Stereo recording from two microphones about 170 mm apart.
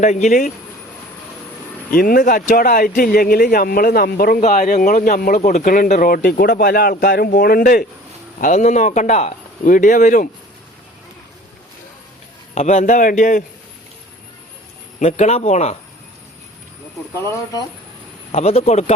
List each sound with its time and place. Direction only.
0.0 s speech: 45° left (ahead or behind)
1.9 s speech: 60° left (ahead or behind)
8.4 s speech: 45° left (ahead or behind)
12.5 s speech: 45° left (ahead or behind)
14.9 s speech: 40° left (ahead or behind)
17.2 s speech: 20° left (ahead or behind)
18.3 s speech: 35° left (ahead or behind)